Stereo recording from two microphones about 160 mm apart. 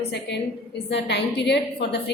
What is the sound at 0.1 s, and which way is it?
A woman's voice, 90° left.